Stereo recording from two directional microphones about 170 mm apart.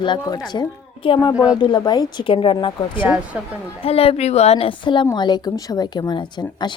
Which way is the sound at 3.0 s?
5° right (ahead or behind).